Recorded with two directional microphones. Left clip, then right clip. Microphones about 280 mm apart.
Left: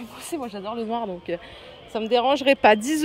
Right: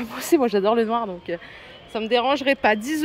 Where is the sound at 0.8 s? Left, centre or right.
Centre.